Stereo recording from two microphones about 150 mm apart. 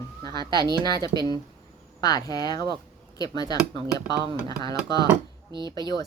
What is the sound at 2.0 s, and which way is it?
Speech, 25° left (ahead or behind).